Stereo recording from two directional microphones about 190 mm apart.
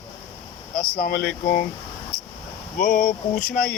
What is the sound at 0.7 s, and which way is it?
Speech, 50° left (ahead or behind).